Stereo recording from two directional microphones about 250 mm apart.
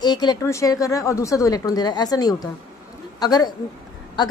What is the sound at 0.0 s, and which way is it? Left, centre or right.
A woman's voice, centre.